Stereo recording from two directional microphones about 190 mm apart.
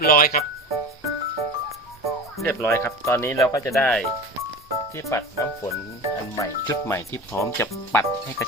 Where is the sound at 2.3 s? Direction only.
15° left (ahead or behind).